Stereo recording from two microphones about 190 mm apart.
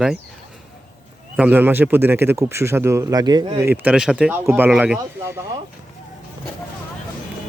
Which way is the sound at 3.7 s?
5° right (ahead or behind).